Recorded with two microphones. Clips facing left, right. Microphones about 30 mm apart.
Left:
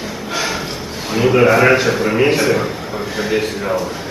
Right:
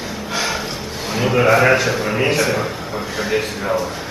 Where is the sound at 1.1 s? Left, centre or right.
Centre.